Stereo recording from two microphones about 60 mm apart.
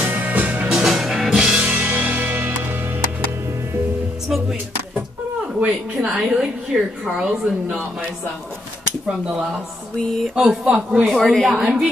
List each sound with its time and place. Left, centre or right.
0.0 s music: right
0.8 s music: centre
1.6 s music: right
5.7 s speech: centre
9.9 s a woman's voice: centre
10.3 s speech: centre
11.1 s a woman's voice: centre
11.4 s a woman's voice: centre